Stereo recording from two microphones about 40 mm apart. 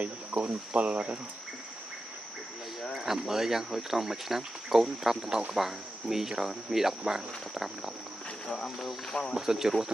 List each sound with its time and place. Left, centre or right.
0.4 s speech: right
2.9 s speech: centre